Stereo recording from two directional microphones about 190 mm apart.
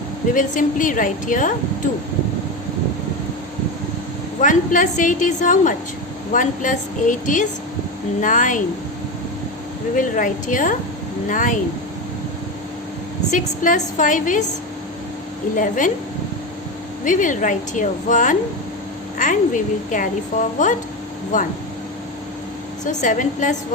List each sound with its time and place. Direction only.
0.3 s a woman's voice: 45° left (ahead or behind)
4.4 s a woman's voice: 45° left (ahead or behind)
10.0 s a woman's voice: 45° left (ahead or behind)
13.3 s a woman's voice: 40° left (ahead or behind)
15.5 s a woman's voice: 45° left (ahead or behind)
17.0 s a woman's voice: 40° left (ahead or behind)
22.8 s a woman's voice: 40° left (ahead or behind)